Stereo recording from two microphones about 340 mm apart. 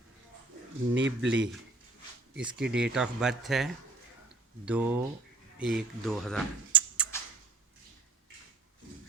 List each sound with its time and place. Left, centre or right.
0.9 s speech: right
2.3 s speech: centre